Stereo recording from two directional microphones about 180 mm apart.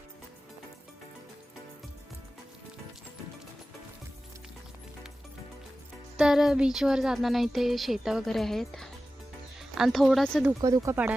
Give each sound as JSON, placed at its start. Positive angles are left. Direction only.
{"t": 6.1, "sound": "speech", "side_deg": -5}
{"t": 10.6, "sound": "speech", "side_deg": -20}